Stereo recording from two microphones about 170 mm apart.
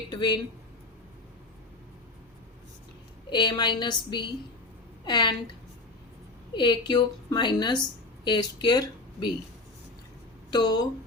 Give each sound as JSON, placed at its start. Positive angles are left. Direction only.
{"t": 0.1, "sound": "speech", "side_deg": 25}
{"t": 3.2, "sound": "speech", "side_deg": 25}
{"t": 6.5, "sound": "a woman's voice", "side_deg": 25}
{"t": 10.5, "sound": "speech", "side_deg": 25}